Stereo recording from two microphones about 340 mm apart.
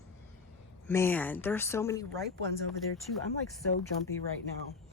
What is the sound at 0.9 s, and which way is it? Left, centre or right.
Speech, centre.